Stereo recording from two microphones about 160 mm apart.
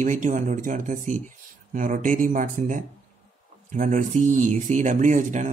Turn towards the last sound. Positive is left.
turn(degrees=-50)  # may be behind; listen again after turning